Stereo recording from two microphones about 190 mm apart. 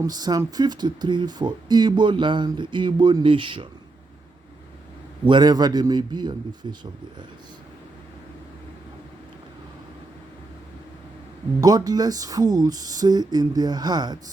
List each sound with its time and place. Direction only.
0.0 s speech: 20° right (ahead or behind)
5.2 s speech: 25° right (ahead or behind)
11.6 s speech: 20° right (ahead or behind)